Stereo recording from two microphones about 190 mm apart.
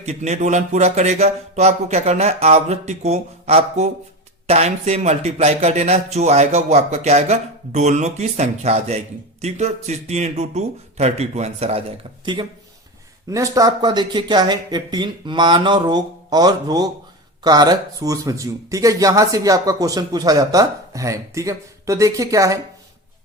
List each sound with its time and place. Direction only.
0.0 s a man's voice: 35° right (ahead or behind); by 22.5 s 15° right (ahead or behind)